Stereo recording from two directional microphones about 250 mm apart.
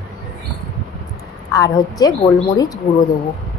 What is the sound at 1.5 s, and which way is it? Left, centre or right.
Speech, centre.